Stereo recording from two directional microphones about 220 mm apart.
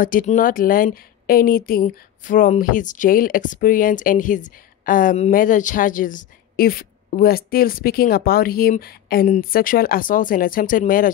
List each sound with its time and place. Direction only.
0.0 s speech: 40° left (ahead or behind)